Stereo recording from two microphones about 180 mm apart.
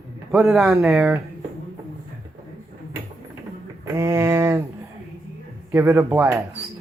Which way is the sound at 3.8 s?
15° right (ahead or behind).